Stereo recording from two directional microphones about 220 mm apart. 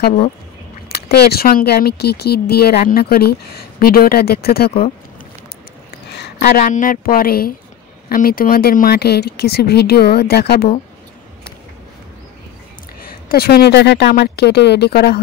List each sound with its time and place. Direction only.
0.8 s speech: 45° left (ahead or behind)
6.1 s speech: 45° left (ahead or behind)
13.0 s speech: 45° left (ahead or behind)